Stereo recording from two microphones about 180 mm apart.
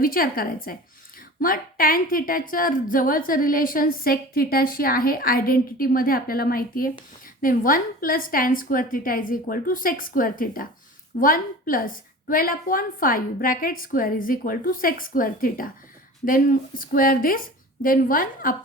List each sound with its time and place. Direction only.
0.0 s a woman's voice: 55° left (ahead or behind)